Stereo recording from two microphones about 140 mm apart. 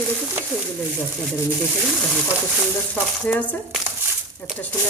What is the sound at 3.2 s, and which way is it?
Speech, 10° left (ahead or behind).